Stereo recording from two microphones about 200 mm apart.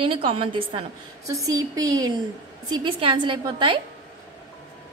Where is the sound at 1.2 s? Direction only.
15° right (ahead or behind).